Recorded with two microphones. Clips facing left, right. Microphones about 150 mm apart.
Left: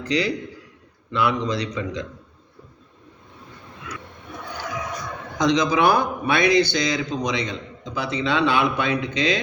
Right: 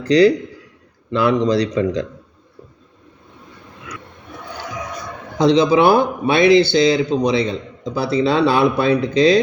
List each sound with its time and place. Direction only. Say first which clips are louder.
0.0 s a man's voice: right 11 dB; 35° right (ahead or behind)
5.4 s a man's voice: right 6 dB; 30° right (ahead or behind)